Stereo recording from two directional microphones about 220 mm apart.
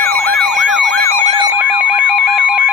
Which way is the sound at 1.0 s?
30° right (ahead or behind).